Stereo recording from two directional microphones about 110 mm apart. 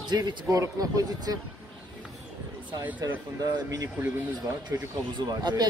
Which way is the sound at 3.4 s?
35° right (ahead or behind).